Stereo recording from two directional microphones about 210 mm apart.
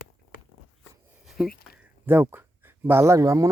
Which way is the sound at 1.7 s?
10° right (ahead or behind).